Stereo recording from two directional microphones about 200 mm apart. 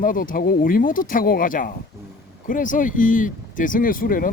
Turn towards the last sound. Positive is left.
turn(degrees=45)  # may be behind; listen again after turning